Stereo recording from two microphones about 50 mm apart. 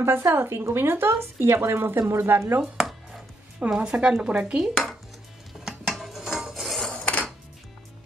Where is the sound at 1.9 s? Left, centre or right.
Right.